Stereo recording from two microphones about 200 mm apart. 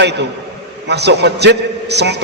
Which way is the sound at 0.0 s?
60° right (ahead or behind).